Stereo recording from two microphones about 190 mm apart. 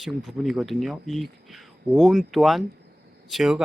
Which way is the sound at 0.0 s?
Centre (ahead or behind).